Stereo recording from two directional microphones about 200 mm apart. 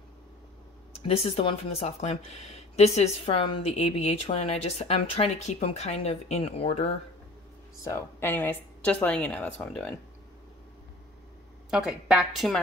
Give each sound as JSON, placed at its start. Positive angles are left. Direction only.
{"t": 1.0, "sound": "speech", "side_deg": 30}
{"t": 7.8, "sound": "speech", "side_deg": 15}
{"t": 11.7, "sound": "a woman's voice", "side_deg": -5}